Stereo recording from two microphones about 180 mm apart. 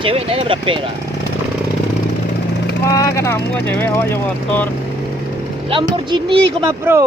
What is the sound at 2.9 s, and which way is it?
Speech, 20° left (ahead or behind).